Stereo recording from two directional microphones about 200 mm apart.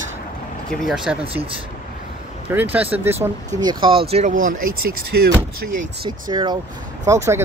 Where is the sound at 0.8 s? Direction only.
Centre (ahead or behind).